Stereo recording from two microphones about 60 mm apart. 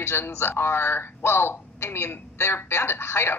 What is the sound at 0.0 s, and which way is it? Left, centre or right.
A woman's voice, left.